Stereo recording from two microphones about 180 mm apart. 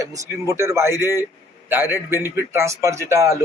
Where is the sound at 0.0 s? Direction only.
20° right (ahead or behind).